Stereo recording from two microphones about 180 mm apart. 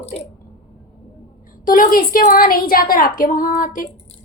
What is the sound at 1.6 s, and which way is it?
A woman's voice, 50° left (ahead or behind).